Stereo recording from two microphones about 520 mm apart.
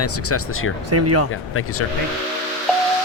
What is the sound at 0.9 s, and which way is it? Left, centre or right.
Speech, right.